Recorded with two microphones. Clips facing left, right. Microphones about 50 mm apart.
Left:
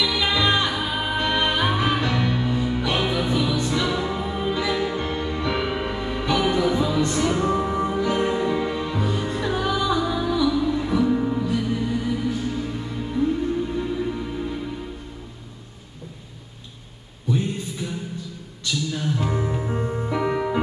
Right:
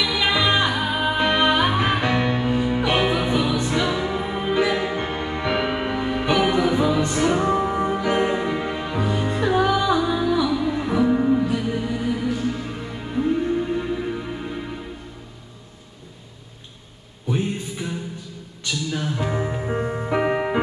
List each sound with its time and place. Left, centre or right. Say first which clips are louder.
0.0 s music: right 1 dB; right
19.1 s music: even; centre